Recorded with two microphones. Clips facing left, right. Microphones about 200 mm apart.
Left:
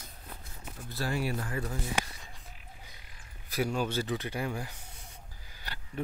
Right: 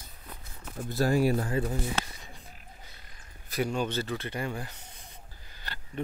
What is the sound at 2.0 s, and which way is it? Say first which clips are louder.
Speech: even; 15° left (ahead or behind).